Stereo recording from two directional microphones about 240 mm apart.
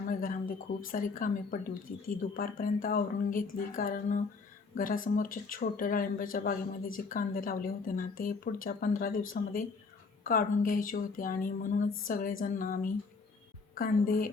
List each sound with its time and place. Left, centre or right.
0.1 s speech: left